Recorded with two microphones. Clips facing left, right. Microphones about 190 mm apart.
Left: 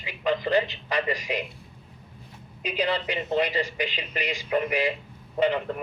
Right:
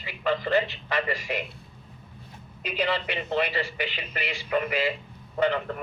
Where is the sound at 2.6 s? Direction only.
15° left (ahead or behind).